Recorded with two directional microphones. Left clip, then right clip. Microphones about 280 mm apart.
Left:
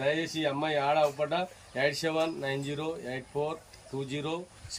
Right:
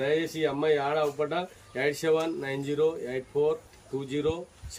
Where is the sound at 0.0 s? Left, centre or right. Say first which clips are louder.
Right 2 dB; centre.